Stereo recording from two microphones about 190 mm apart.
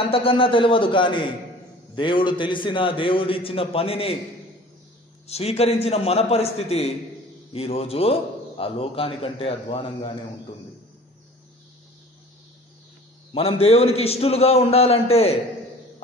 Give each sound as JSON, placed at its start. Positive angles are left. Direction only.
{"t": 0.1, "sound": "a man's voice", "side_deg": 30}
{"t": 5.2, "sound": "a man's voice", "side_deg": 30}
{"t": 13.3, "sound": "a man's voice", "side_deg": 30}